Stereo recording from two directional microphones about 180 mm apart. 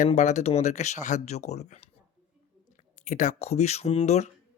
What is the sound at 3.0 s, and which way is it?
Speech, 45° left (ahead or behind).